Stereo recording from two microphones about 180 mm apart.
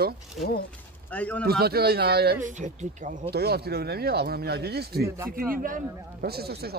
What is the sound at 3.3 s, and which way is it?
Speech, 60° right (ahead or behind).